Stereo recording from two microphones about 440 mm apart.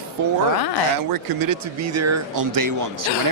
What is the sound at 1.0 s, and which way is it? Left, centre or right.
Speech, right.